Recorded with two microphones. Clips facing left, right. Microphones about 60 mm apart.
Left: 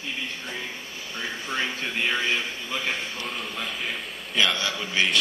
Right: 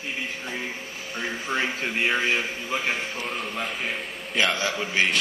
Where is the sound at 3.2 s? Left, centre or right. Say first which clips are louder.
Right 2 dB; centre.